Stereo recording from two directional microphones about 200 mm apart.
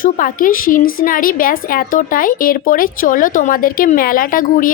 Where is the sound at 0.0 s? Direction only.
45° left (ahead or behind).